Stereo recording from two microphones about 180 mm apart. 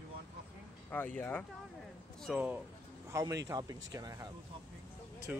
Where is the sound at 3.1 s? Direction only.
20° right (ahead or behind).